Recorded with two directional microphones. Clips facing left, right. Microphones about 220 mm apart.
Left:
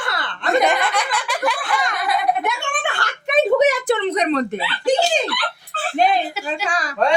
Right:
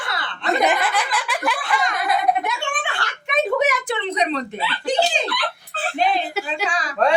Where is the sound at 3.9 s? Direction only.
50° left (ahead or behind).